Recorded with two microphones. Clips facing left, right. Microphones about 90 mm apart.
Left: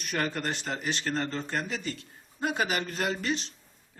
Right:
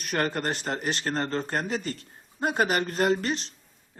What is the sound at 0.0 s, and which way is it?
Speech, 45° right (ahead or behind).